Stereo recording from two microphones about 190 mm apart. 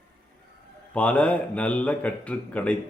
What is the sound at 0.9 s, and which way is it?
Speech, 5° left (ahead or behind).